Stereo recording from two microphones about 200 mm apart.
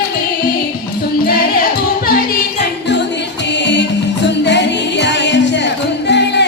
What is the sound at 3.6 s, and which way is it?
Music, 60° left (ahead or behind).